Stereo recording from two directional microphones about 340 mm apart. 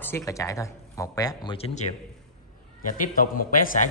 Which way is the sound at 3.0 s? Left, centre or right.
Left.